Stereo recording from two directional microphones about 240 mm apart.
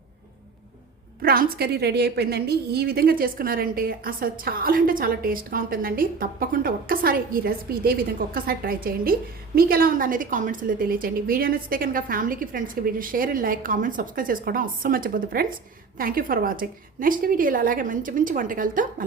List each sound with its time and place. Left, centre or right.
1.2 s a woman's voice: right